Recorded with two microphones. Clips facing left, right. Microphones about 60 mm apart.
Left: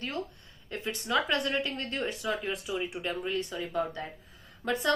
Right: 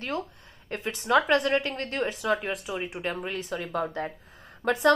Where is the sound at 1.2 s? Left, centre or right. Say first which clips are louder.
Right 6 dB; right.